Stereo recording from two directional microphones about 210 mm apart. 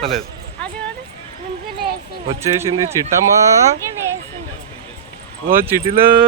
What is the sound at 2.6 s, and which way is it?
Speech, 15° right (ahead or behind).